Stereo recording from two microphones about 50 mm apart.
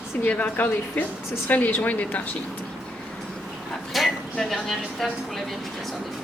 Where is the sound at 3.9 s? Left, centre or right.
Centre.